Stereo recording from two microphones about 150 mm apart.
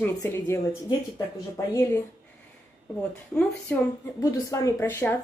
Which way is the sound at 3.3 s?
10° left (ahead or behind).